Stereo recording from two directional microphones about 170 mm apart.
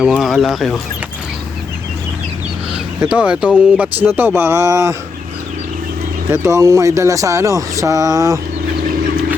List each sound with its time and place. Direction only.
0.0 s speech: 5° right (ahead or behind)
2.7 s speech: 5° right (ahead or behind)
6.3 s speech: 15° right (ahead or behind)